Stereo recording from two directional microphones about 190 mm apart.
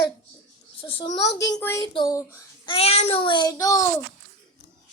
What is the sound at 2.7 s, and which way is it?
A child's voice, 30° left (ahead or behind).